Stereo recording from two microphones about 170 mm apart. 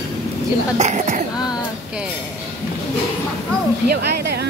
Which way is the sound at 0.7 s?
45° right (ahead or behind).